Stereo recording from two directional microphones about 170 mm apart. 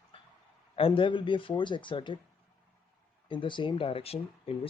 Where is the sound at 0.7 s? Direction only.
30° left (ahead or behind).